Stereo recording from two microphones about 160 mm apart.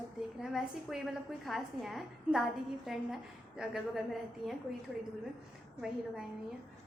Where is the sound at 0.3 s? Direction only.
Centre (ahead or behind).